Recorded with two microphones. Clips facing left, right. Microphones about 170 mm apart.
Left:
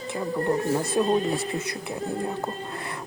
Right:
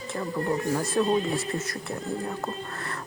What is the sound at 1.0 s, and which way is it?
A man's voice, 15° left (ahead or behind).